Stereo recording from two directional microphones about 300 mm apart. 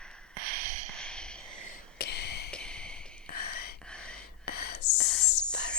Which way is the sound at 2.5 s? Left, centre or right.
Centre.